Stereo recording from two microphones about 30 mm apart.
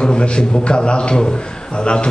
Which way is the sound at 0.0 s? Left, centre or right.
Left.